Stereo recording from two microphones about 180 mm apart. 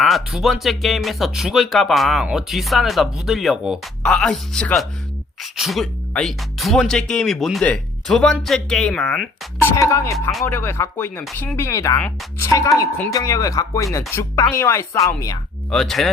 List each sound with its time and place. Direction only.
0.0 s speech: centre (ahead or behind)
9.7 s a woman's voice: 15° left (ahead or behind)
15.7 s speech: centre (ahead or behind)